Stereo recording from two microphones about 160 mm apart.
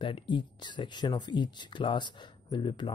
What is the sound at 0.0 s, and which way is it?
Speech, 30° left (ahead or behind).